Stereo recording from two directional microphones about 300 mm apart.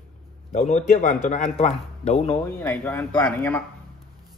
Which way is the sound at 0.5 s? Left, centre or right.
Left.